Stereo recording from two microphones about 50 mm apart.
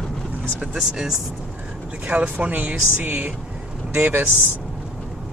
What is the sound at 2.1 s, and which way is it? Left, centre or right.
Speech, right.